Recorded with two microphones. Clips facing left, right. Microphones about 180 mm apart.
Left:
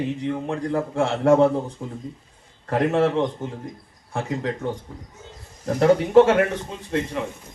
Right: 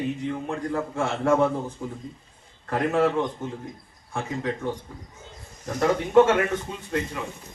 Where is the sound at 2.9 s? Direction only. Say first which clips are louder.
Left 1 dB; 25° left (ahead or behind).